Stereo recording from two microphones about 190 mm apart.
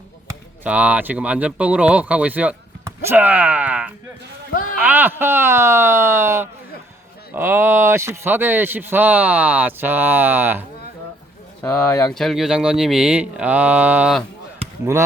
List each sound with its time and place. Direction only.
0.3 s speech: 10° right (ahead or behind)
11.6 s speech: 15° left (ahead or behind)
12.1 s speech: centre (ahead or behind)